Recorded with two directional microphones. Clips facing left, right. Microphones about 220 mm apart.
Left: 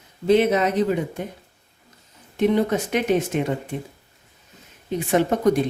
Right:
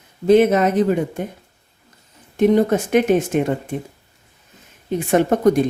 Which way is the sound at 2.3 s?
45° right (ahead or behind).